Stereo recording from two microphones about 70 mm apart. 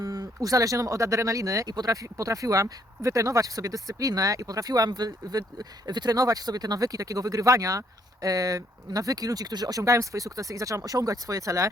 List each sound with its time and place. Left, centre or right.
0.0 s speech: right
6.1 s speech: right